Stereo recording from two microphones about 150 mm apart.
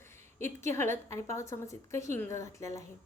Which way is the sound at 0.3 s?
15° left (ahead or behind).